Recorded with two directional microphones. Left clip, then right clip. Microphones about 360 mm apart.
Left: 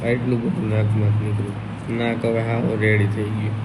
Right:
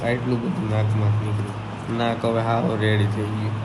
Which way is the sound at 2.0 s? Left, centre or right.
Right.